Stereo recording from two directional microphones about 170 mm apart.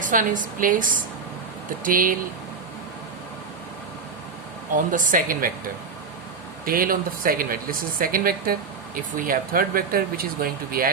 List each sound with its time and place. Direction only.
0.0 s a woman's voice: 50° right (ahead or behind)
4.9 s a woman's voice: 50° right (ahead or behind)
6.7 s speech: 55° right (ahead or behind)